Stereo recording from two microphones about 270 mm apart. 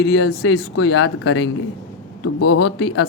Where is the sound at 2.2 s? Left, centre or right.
Left.